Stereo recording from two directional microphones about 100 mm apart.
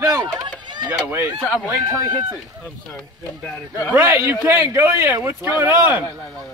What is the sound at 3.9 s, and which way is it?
Speech, 30° right (ahead or behind).